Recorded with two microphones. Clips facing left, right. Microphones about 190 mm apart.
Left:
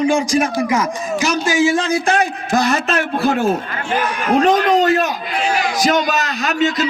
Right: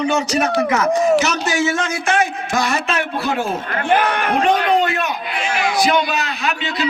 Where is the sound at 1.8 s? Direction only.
35° left (ahead or behind).